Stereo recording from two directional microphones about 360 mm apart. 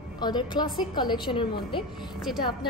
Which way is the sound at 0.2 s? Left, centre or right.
Centre.